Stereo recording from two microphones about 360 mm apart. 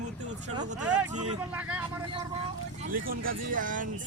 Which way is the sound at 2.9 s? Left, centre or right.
Right.